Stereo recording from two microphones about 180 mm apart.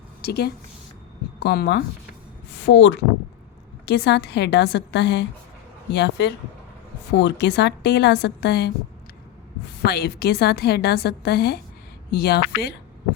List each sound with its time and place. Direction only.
0.2 s speech: 60° left (ahead or behind)
2.6 s a woman's voice: 80° left; by 8.7 s 65° left (ahead or behind)
9.8 s a woman's voice: 60° left (ahead or behind)